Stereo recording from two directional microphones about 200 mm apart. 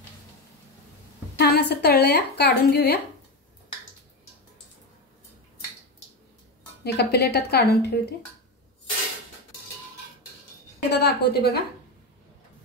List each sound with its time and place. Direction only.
1.4 s a woman's voice: 55° left (ahead or behind)
6.8 s a woman's voice: 55° left (ahead or behind)
10.9 s a woman's voice: 55° left (ahead or behind)